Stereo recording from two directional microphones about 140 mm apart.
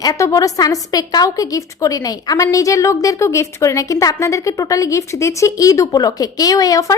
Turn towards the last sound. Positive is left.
turn(degrees=25)  # may be behind; listen again after turning